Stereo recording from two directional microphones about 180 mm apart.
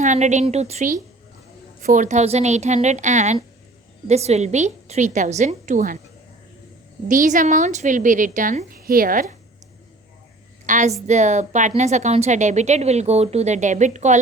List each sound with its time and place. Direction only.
0.0 s speech: 40° right (ahead or behind)
7.1 s a woman's voice: 45° right (ahead or behind)
10.7 s a woman's voice: 45° right (ahead or behind)